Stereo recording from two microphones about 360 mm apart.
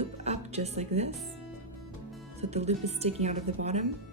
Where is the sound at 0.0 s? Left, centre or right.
Centre.